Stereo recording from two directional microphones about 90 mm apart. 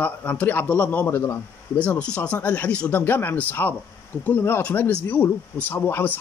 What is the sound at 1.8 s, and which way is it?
A man's voice, 15° left (ahead or behind).